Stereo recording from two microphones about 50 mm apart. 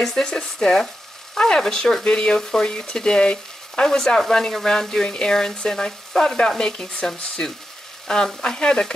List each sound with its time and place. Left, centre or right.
0.0 s speech: centre